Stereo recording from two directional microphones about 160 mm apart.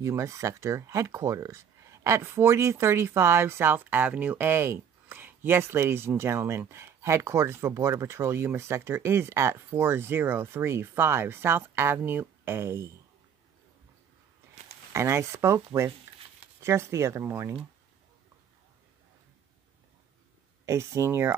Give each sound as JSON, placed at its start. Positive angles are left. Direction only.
{"t": 0.0, "sound": "speech", "side_deg": -20}
{"t": 14.9, "sound": "speech", "side_deg": -15}
{"t": 20.6, "sound": "speech", "side_deg": -20}